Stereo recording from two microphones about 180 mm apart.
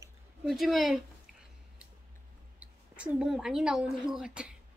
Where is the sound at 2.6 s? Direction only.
5° right (ahead or behind).